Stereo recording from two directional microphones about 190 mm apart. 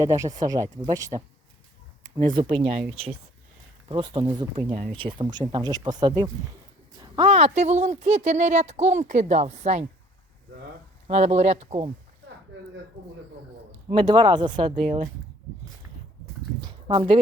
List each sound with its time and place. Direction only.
0.0 s speech: 15° right (ahead or behind)
1.1 s speech: 30° right (ahead or behind)
2.3 s speech: 25° right (ahead or behind)
7.0 s a sound: 25° right (ahead or behind)
7.3 s speech: 35° right (ahead or behind)
11.1 s speech: 35° right (ahead or behind)
13.8 s speech: 25° right (ahead or behind)
16.6 s a sound: 25° right (ahead or behind)